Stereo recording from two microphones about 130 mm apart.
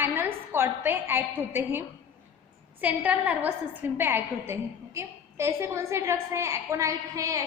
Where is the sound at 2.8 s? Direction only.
10° right (ahead or behind).